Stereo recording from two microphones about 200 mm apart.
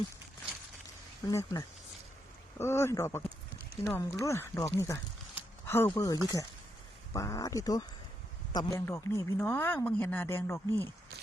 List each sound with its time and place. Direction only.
1.3 s speech: 15° left (ahead or behind)